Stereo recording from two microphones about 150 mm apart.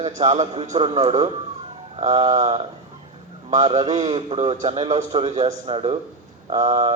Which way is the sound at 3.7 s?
45° right (ahead or behind).